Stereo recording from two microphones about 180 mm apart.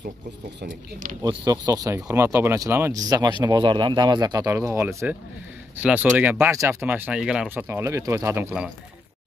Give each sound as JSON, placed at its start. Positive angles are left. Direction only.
{"t": 1.2, "sound": "speech", "side_deg": -20}